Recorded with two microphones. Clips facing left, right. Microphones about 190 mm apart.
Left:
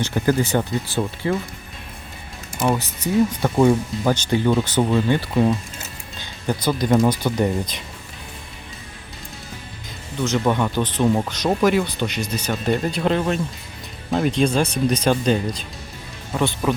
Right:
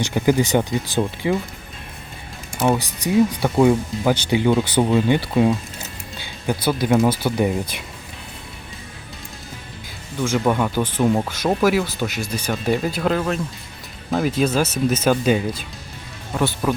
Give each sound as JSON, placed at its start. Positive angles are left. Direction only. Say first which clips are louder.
{"t": 0.0, "sound": "speech", "louder": "right 2 dB", "side_deg": -15}
{"t": 2.6, "sound": "speech", "louder": "right 2 dB", "side_deg": -10}
{"t": 5.3, "sound": "speech", "louder": "right 1 dB", "side_deg": -5}
{"t": 10.2, "sound": "speech", "louder": "right 1 dB", "side_deg": -5}